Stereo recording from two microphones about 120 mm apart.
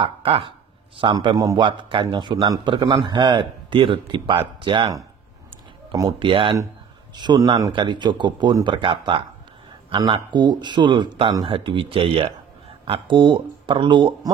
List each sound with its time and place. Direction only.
0.0 s a man's voice: 50° right (ahead or behind)
7.2 s a man's voice: 35° right (ahead or behind)